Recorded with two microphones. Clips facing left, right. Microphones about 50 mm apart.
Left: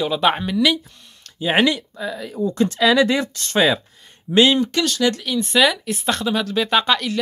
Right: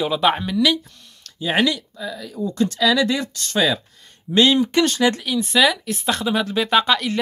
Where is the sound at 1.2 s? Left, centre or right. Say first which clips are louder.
Left 2 dB; left.